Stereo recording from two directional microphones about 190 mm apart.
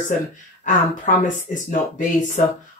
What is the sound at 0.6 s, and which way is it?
Speech, 40° left (ahead or behind).